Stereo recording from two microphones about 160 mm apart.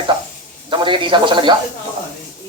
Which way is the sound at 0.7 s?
30° right (ahead or behind).